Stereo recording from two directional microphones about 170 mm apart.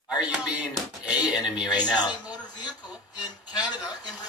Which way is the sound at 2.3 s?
25° left (ahead or behind).